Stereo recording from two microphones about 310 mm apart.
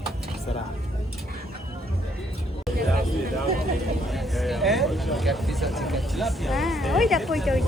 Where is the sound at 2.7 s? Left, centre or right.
Right.